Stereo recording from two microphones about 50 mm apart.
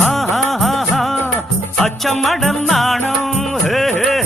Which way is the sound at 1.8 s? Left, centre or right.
Centre.